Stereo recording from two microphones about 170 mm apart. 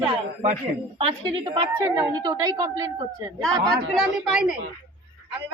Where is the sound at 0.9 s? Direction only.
35° right (ahead or behind).